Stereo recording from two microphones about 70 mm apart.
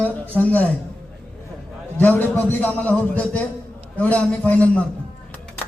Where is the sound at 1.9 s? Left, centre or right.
Left.